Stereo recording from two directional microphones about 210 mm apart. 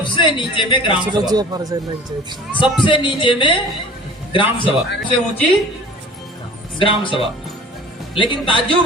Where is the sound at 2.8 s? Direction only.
25° left (ahead or behind).